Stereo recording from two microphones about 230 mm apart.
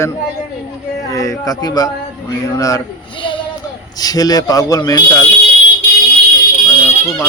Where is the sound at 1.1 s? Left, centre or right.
Centre.